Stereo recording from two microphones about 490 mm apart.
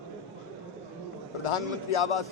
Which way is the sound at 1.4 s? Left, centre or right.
Left.